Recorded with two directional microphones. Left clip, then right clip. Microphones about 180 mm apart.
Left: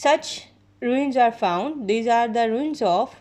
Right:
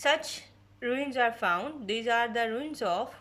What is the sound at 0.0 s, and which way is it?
Speech, 25° left (ahead or behind).